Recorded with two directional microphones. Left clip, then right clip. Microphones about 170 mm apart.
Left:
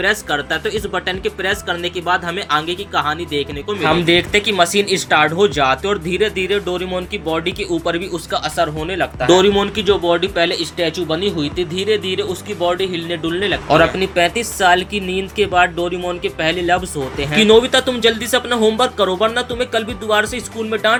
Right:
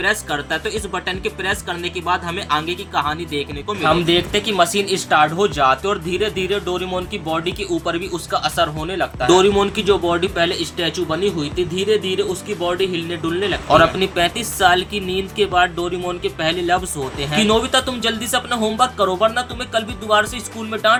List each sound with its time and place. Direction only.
0.0 s speech: 10° left (ahead or behind)
4.0 s speech: 20° left (ahead or behind)